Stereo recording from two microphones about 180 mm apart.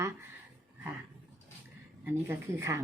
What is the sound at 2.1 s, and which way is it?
Speech, 10° right (ahead or behind).